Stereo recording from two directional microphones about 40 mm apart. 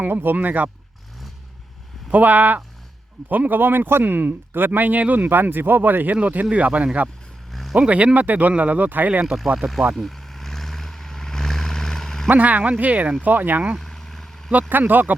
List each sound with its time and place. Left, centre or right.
0.0 s speech: right
0.3 s speech: right
2.1 s speech: right
5.3 s speech: right
6.1 s speech: right
7.5 s vehicle: centre
7.8 s speech: right
9.2 s speech: centre
9.9 s vehicle: centre
12.4 s speech: right
13.2 s speech: right
13.7 s vehicle: centre
14.7 s speech: right